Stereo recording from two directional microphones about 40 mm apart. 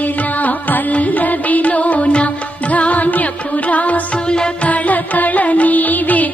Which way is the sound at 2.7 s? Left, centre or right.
Left.